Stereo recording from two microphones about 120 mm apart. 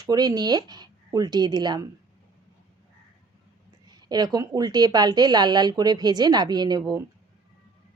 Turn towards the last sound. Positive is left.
turn(degrees=-35)  # may be behind; listen again after turning